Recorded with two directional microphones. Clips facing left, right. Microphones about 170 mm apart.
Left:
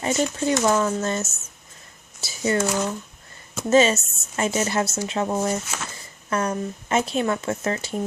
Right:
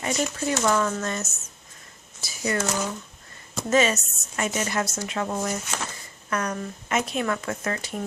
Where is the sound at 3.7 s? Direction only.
30° left (ahead or behind).